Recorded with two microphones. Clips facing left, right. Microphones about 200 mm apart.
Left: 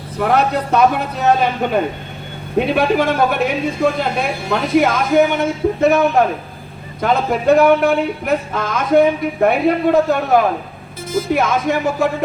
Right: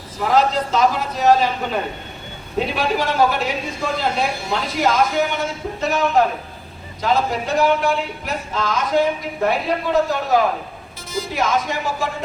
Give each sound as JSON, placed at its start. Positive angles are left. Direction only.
{"t": 0.2, "sound": "speech", "side_deg": 60}
{"t": 2.6, "sound": "speech", "side_deg": 55}